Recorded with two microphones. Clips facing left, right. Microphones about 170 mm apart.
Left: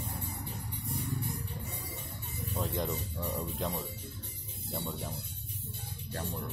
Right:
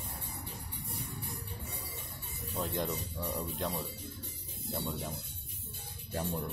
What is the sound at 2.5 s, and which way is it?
Speech, centre (ahead or behind).